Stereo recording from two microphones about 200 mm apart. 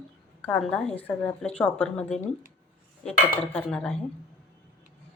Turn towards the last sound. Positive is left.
turn(degrees=5)  # may be behind; listen again after turning